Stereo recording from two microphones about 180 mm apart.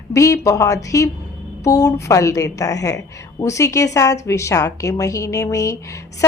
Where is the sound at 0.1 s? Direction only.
20° left (ahead or behind).